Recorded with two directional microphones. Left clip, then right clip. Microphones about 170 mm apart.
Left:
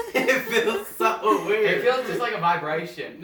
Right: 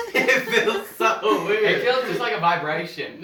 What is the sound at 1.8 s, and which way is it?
Speech, 20° right (ahead or behind).